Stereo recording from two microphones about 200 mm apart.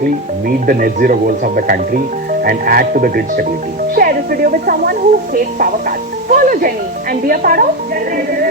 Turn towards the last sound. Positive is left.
turn(degrees=-45)  # may be behind; listen again after turning